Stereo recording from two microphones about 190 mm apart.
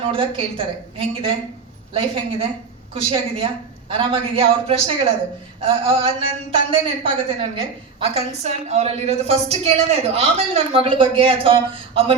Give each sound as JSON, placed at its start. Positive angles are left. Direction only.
{"t": 0.0, "sound": "a woman's voice", "side_deg": -30}